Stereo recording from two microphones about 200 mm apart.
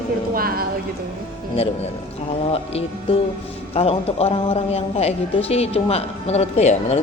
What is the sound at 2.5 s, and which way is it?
Music, 30° left (ahead or behind).